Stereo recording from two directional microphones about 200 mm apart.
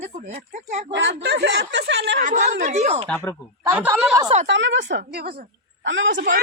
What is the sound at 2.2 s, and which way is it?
Speech, 40° right (ahead or behind).